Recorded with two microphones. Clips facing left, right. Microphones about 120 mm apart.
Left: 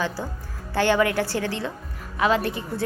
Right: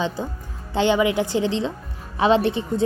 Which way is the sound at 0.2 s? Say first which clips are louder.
Right 3 dB; 20° right (ahead or behind).